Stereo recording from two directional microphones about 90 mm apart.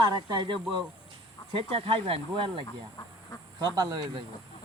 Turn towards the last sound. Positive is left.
turn(degrees=-50)  # may be behind; listen again after turning